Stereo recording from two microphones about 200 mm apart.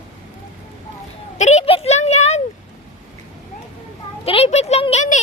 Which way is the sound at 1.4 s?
35° left (ahead or behind).